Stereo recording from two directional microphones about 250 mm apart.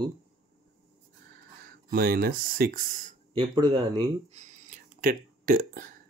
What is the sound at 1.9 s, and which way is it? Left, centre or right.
Speech, right.